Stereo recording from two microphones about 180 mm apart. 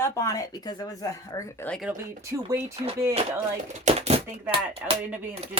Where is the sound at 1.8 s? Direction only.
10° right (ahead or behind).